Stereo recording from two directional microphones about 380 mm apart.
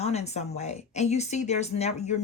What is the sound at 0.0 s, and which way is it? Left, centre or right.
A woman's voice, centre.